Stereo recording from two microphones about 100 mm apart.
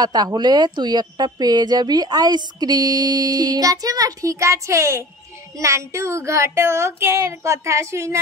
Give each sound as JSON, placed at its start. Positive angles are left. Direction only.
{"t": 0.0, "sound": "a woman's voice", "side_deg": -45}
{"t": 5.6, "sound": "child singing", "side_deg": -30}